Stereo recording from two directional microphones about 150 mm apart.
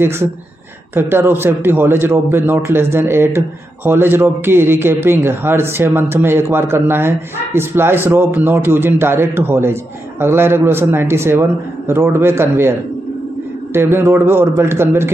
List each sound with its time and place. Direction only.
0.9 s a man's voice: 15° right (ahead or behind)
13.7 s a man's voice: 15° right (ahead or behind)